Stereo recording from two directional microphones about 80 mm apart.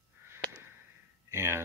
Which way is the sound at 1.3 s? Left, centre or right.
Right.